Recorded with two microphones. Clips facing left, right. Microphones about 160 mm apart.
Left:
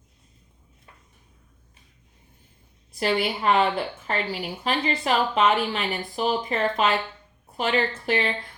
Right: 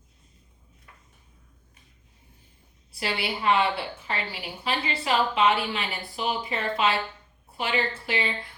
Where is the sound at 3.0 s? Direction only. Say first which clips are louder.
Left 6 dB; 45° left (ahead or behind).